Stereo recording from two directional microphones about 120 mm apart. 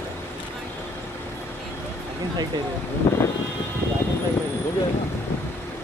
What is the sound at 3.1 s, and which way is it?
Vehicle, 20° left (ahead or behind).